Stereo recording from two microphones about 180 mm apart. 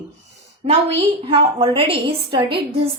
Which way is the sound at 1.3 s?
30° right (ahead or behind).